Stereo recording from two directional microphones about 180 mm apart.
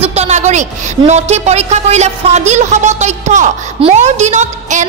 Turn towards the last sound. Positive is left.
turn(degrees=-40)  # may be behind; listen again after turning